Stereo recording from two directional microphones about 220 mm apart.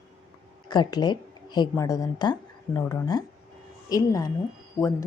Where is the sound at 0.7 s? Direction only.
20° left (ahead or behind).